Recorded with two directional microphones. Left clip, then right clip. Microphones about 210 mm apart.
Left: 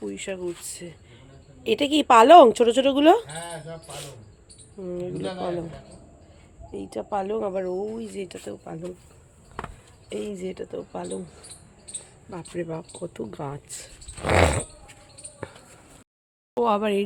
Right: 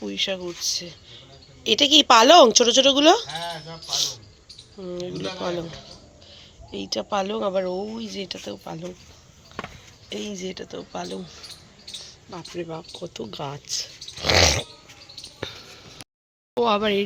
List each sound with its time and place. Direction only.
0.0 s speech: 5° right (ahead or behind); by 3.2 s 10° left (ahead or behind)
3.2 s a sound: 40° left (ahead or behind)
4.8 s speech: 10° left (ahead or behind)
6.7 s speech: 5° right (ahead or behind)
10.1 s speech: 5° left (ahead or behind)
12.3 s speech: 20° left (ahead or behind)
16.6 s speech: centre (ahead or behind)